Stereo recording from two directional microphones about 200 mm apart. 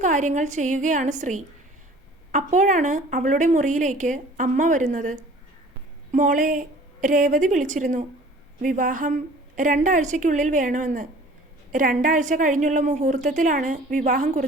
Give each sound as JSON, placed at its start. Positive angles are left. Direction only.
{"t": 0.0, "sound": "a woman's voice", "side_deg": -40}